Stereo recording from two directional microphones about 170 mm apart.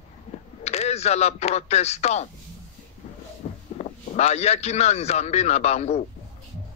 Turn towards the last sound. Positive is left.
turn(degrees=40)  # may be behind; listen again after turning